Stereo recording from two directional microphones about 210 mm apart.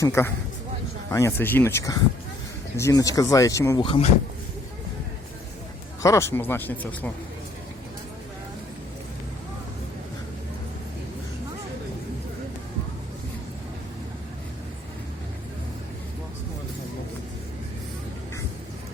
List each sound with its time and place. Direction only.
0.0 s speech: 10° left (ahead or behind)
6.0 s speech: 15° left (ahead or behind)